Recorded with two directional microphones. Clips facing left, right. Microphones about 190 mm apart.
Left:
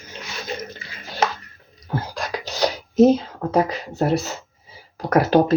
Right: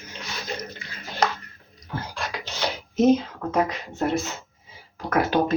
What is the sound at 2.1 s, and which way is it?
Speech, 40° left (ahead or behind).